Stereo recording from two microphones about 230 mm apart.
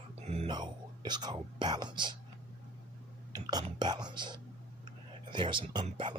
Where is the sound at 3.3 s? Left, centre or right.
Centre.